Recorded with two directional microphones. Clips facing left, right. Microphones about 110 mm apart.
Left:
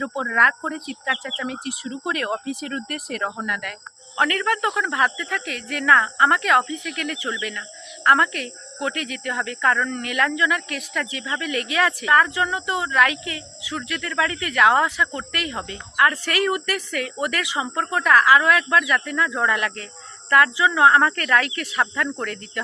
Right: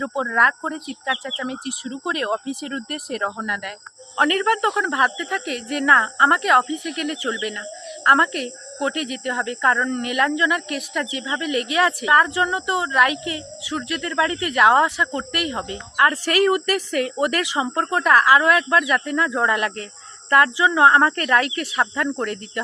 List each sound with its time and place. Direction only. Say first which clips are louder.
0.0 s speech: right 1 dB; 20° right (ahead or behind)
4.2 s speech: right 3 dB; 30° right (ahead or behind)
10.8 s speech: right 3 dB; 15° right (ahead or behind)